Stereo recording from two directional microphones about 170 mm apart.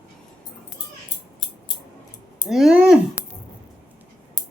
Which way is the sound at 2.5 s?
Centre (ahead or behind).